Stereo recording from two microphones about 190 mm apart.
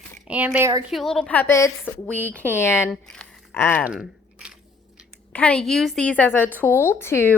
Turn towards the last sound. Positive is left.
turn(degrees=10)  # may be behind; listen again after turning